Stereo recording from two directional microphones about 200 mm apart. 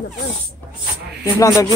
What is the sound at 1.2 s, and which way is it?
Speech, 15° left (ahead or behind).